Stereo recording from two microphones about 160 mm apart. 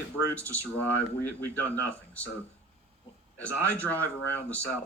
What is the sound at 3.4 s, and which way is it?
Speech, 10° left (ahead or behind).